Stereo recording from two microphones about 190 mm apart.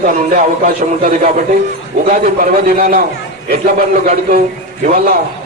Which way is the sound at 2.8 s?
55° right (ahead or behind).